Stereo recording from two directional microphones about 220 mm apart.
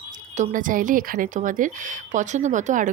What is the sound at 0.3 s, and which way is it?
Speech, 35° right (ahead or behind).